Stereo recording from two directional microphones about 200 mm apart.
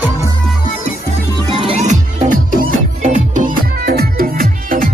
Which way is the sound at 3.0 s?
35° right (ahead or behind).